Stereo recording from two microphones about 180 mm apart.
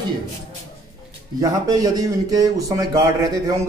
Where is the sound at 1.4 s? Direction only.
20° right (ahead or behind).